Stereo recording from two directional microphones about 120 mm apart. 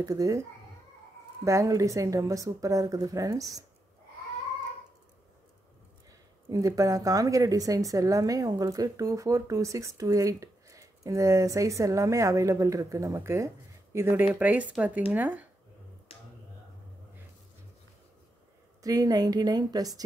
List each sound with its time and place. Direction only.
0.0 s a woman's voice: 30° right (ahead or behind)
1.4 s a woman's voice: 25° right (ahead or behind)
6.5 s a woman's voice: 30° right (ahead or behind)
18.8 s a woman's voice: 30° right (ahead or behind)